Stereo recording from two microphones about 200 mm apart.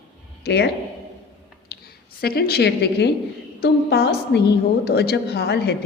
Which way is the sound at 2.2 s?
50° left (ahead or behind).